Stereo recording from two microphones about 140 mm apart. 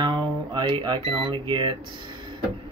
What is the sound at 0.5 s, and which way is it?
Speech, 35° right (ahead or behind).